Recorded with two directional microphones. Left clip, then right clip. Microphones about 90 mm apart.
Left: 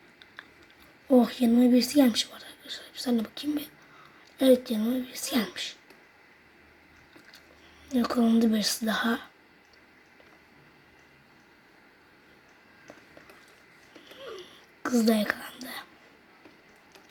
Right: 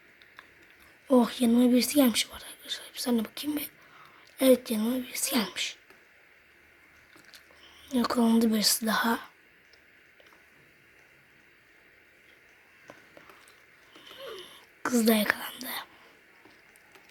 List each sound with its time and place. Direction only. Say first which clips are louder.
1.0 s a woman's voice: left 1 dB; 20° right (ahead or behind)
7.9 s a woman's voice: even; 20° right (ahead or behind)
14.3 s whispering: even; 25° right (ahead or behind)